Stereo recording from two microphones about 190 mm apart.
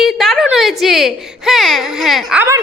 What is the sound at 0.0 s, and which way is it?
Speech, centre (ahead or behind).